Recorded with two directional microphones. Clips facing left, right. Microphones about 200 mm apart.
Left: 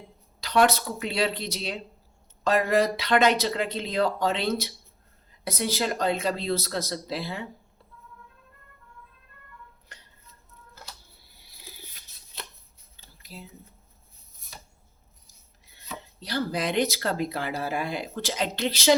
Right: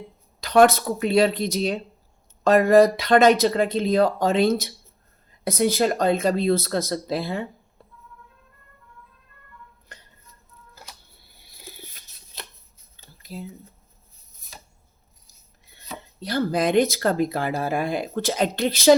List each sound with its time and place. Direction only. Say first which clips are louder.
0.4 s speech: right 6 dB; 50° right (ahead or behind)
16.2 s speech: right 6 dB; 50° right (ahead or behind)